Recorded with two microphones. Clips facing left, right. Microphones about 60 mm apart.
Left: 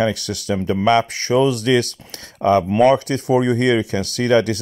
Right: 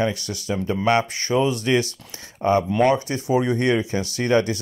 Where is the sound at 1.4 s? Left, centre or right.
Left.